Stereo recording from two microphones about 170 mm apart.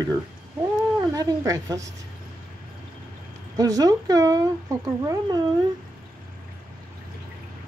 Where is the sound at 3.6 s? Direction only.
20° right (ahead or behind).